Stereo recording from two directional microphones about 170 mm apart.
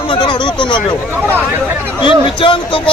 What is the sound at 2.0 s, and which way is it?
Speech, 30° left (ahead or behind).